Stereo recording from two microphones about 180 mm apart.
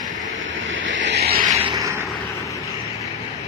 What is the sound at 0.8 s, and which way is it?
Vehicle, 85° right.